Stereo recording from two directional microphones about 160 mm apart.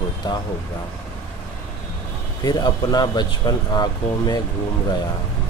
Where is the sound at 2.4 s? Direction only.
25° left (ahead or behind).